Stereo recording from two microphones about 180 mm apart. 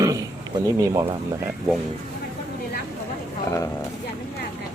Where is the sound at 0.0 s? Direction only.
20° right (ahead or behind).